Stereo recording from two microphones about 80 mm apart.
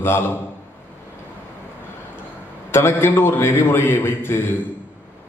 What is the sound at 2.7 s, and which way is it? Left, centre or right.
A man's voice, left.